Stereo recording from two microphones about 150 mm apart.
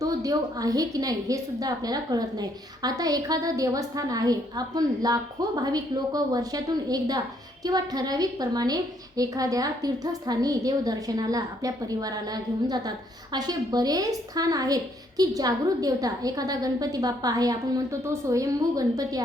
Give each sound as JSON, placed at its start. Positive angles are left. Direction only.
{"t": 0.0, "sound": "a woman's voice", "side_deg": -25}